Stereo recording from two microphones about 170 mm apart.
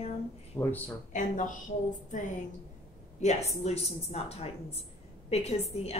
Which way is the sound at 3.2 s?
40° left (ahead or behind).